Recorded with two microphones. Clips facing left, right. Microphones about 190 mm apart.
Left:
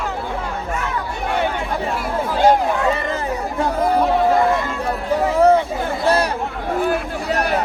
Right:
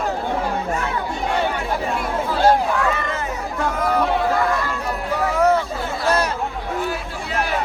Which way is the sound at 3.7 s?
30° left (ahead or behind).